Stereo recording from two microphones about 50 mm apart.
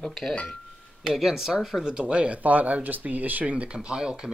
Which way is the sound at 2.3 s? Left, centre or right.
Right.